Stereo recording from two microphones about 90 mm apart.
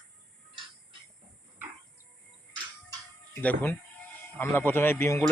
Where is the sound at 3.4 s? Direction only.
20° left (ahead or behind).